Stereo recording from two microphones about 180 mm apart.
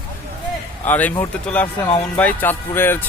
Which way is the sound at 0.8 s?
10° left (ahead or behind).